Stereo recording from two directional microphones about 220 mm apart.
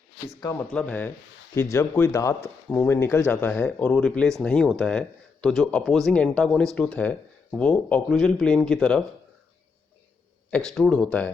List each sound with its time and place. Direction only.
0.3 s speech: 15° left (ahead or behind)
0.7 s speech: 5° left (ahead or behind)
10.5 s speech: centre (ahead or behind)